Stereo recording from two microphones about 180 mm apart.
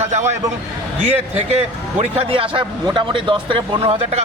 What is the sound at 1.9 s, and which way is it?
A man's voice, 30° right (ahead or behind).